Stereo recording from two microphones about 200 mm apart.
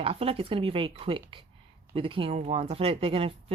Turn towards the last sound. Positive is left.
turn(degrees=-25)  # may be behind; listen again after turning